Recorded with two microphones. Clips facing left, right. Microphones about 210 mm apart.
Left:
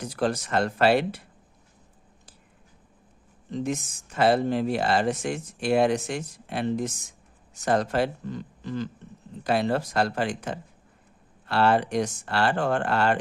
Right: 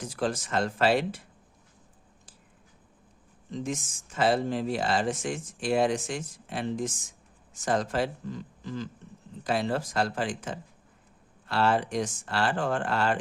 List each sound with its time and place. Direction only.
0.0 s speech: 65° left (ahead or behind)
3.5 s speech: 65° left (ahead or behind)